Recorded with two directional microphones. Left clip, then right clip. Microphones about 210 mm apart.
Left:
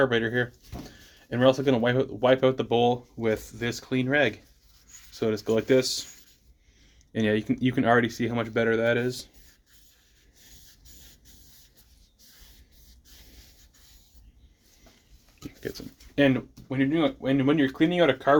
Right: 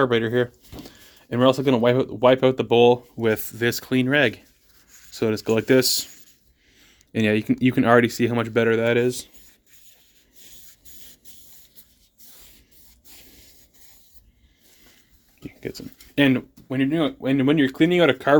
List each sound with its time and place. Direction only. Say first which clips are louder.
0.0 s speech: right 4 dB; 45° right (ahead or behind)
15.4 s dog: right 3 dB; 30° right (ahead or behind)
16.1 s speech: right 3 dB; 50° right (ahead or behind)